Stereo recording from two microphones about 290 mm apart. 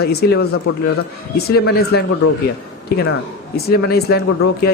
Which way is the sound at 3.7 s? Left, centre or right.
Left.